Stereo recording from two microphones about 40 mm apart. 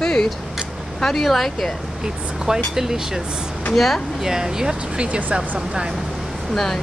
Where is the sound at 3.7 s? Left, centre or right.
Centre.